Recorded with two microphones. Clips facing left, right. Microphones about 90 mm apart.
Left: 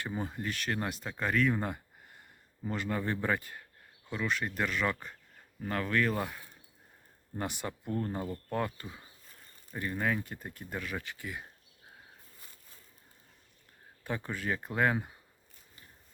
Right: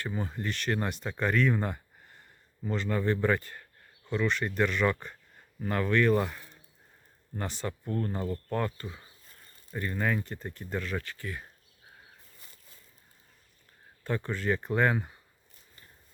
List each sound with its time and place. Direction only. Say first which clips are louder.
0.0 s speech: right 1 dB; 15° left (ahead or behind)
0.3 s speech: right 3 dB; 5° left (ahead or behind)
14.0 s speech: right 4 dB; 10° left (ahead or behind)